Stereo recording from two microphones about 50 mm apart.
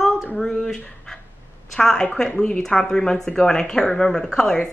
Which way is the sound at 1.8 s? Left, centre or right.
Centre.